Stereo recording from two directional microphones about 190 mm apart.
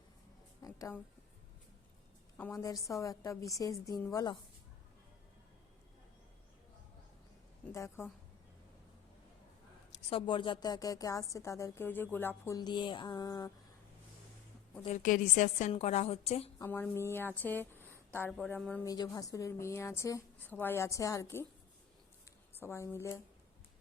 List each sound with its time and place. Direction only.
0.6 s a sound: 15° left (ahead or behind)
2.4 s a woman's voice: 15° left (ahead or behind)
7.6 s a woman's voice: 15° left (ahead or behind)
9.9 s a woman's voice: 30° left (ahead or behind)
14.8 s a woman's voice: 40° left (ahead or behind)
16.6 s a woman's voice: 10° left (ahead or behind)
18.9 s a woman's voice: 20° left (ahead or behind)
22.5 s a woman's voice: 15° left (ahead or behind)